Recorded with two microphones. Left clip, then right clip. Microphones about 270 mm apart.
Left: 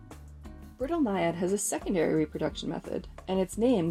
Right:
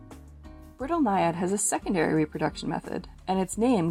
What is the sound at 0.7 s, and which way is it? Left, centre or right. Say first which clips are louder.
Speech: right 4 dB; right.